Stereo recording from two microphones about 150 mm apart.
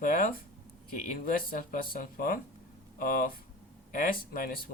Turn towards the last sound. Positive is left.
turn(degrees=75)  # may be behind; listen again after turning